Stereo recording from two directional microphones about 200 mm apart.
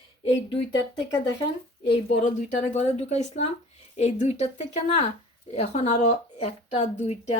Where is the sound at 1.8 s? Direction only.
35° left (ahead or behind).